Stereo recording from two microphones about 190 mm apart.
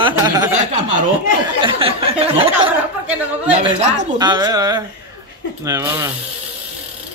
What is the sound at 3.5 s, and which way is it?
Speech, 35° right (ahead or behind).